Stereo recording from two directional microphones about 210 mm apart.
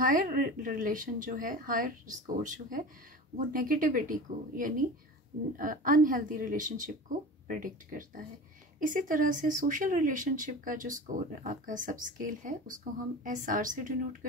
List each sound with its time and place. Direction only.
0.0 s speech: 40° right (ahead or behind)